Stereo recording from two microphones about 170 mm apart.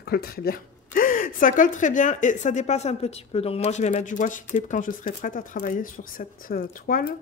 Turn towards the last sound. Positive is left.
turn(degrees=55)  # may be behind; listen again after turning